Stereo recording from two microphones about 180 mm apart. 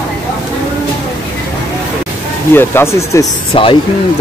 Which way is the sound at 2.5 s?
10° left (ahead or behind).